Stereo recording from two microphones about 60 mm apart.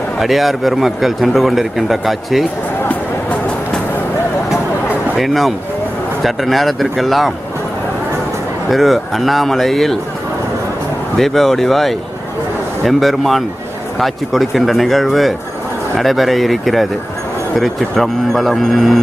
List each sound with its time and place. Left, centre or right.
0.2 s speech: centre
2.9 s music: left
5.1 s speech: centre
8.7 s speech: centre
11.2 s speech: centre